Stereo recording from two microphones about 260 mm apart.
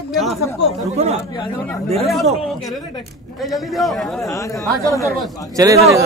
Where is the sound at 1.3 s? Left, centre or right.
Centre.